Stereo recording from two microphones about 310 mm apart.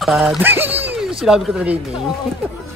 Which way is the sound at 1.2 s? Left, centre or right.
Centre.